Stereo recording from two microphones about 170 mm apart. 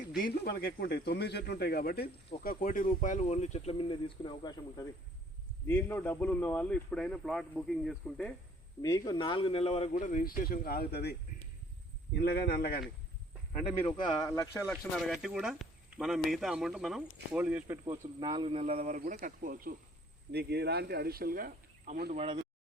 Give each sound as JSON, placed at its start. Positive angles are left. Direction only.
{"t": 0.2, "sound": "speech", "side_deg": 60}
{"t": 5.6, "sound": "a man's voice", "side_deg": 10}
{"t": 8.8, "sound": "speech", "side_deg": 20}
{"t": 9.9, "sound": "speech", "side_deg": 50}
{"t": 12.2, "sound": "speech", "side_deg": 70}
{"t": 13.5, "sound": "speech", "side_deg": 35}
{"t": 14.7, "sound": "speech", "side_deg": 0}
{"t": 18.2, "sound": "a man's voice", "side_deg": -25}
{"t": 18.9, "sound": "speech", "side_deg": -55}
{"t": 20.3, "sound": "speech", "side_deg": -75}
{"t": 22.1, "sound": "a man's voice", "side_deg": -35}